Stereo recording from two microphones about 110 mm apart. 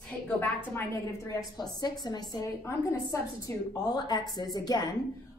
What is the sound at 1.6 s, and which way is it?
A woman's voice, 40° left (ahead or behind).